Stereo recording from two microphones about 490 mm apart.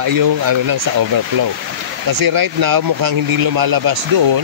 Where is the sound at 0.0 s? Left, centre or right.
Right.